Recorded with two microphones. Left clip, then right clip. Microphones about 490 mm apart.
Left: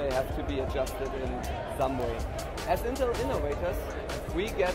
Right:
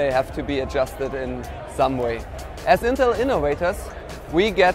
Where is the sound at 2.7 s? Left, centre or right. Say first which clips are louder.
Right 12 dB; right.